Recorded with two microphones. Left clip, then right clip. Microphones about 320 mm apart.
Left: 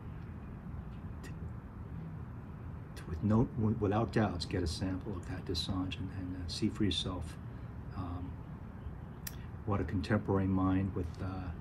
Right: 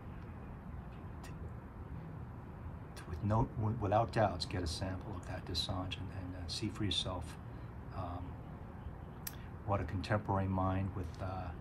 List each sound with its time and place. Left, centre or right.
3.1 s speech: centre
9.7 s speech: centre